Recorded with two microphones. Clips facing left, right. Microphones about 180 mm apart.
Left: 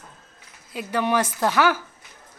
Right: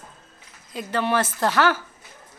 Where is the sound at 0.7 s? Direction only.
10° left (ahead or behind).